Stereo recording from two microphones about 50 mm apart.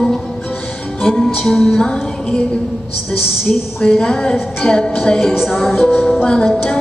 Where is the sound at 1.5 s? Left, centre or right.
Centre.